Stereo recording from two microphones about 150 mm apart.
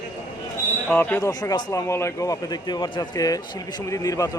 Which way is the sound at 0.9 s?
10° left (ahead or behind).